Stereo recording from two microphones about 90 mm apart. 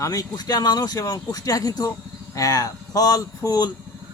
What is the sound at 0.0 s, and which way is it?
Speech, 40° left (ahead or behind).